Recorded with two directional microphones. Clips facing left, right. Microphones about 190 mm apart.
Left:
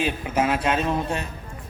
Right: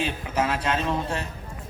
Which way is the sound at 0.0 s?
10° left (ahead or behind).